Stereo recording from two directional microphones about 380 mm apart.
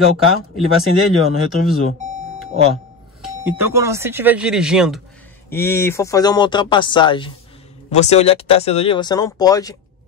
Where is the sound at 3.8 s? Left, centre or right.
Centre.